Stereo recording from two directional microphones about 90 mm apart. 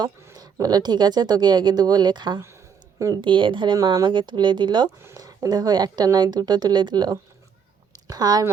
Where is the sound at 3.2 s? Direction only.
65° right (ahead or behind).